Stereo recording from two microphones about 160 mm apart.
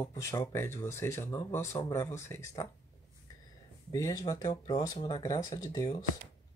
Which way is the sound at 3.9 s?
20° left (ahead or behind).